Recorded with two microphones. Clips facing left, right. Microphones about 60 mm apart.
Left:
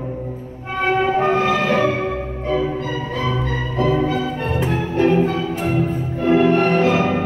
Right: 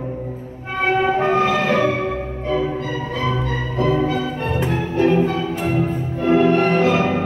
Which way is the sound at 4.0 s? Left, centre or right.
Left.